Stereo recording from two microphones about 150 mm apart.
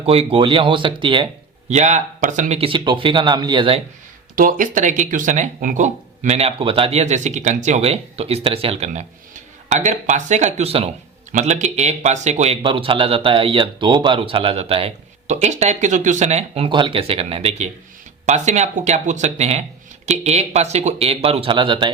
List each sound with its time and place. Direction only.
0.0 s speech: 40° right (ahead or behind)
1.7 s speech: 50° right (ahead or behind)
2.6 s speech: 35° right (ahead or behind)
4.4 s speech: 65° right (ahead or behind); by 8.9 s 40° right (ahead or behind)
8.9 s speech: 55° right (ahead or behind)
11.3 s speech: 55° right (ahead or behind); by 21.9 s 30° right (ahead or behind)